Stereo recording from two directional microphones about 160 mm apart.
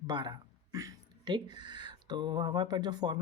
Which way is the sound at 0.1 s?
25° right (ahead or behind).